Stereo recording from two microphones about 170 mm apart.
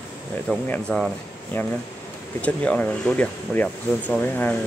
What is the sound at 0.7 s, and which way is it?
Speech, 5° left (ahead or behind).